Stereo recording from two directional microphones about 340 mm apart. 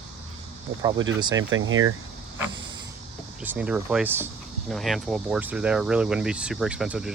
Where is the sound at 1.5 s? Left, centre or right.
Right.